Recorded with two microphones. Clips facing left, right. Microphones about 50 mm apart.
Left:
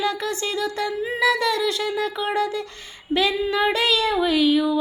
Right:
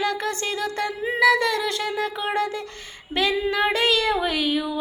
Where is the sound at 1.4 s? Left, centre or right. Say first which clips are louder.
Left 2 dB; right.